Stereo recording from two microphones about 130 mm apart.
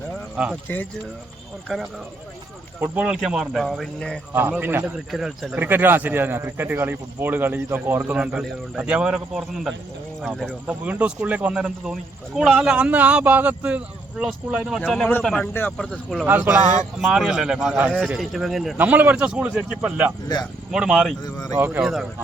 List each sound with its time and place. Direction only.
0.4 s speech: 10° right (ahead or behind)
1.6 s speech: centre (ahead or behind)
2.8 s speech: 10° right (ahead or behind)
4.4 s speech: 15° right (ahead or behind)
4.9 s speech: 5° right (ahead or behind)
5.6 s speech: 15° right (ahead or behind); by 10.5 s centre (ahead or behind)
10.7 s speech: 10° right (ahead or behind)
16.2 s speech: 15° right (ahead or behind)
18.8 s speech: 10° right (ahead or behind)
21.2 s speech: 30° left (ahead or behind)
21.6 s speech: 10° right (ahead or behind)